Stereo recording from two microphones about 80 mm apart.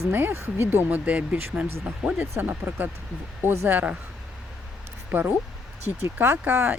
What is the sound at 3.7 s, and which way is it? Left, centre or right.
Speech, right.